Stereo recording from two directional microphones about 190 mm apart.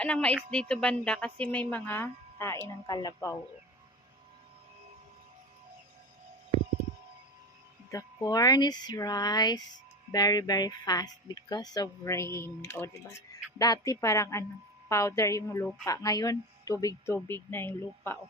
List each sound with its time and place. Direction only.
0.0 s speech: 5° left (ahead or behind)
7.9 s speech: 20° left (ahead or behind)